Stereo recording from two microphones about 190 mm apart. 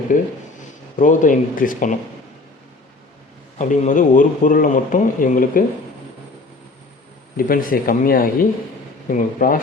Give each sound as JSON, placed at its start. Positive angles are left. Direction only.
{"t": 0.1, "sound": "speech", "side_deg": 45}
{"t": 3.6, "sound": "speech", "side_deg": 40}
{"t": 7.3, "sound": "speech", "side_deg": 50}